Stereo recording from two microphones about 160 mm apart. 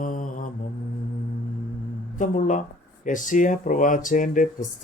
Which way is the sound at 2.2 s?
50° left (ahead or behind).